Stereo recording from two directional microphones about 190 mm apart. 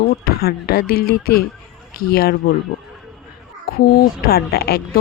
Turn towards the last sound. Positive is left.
turn(degrees=55)  # may be behind; listen again after turning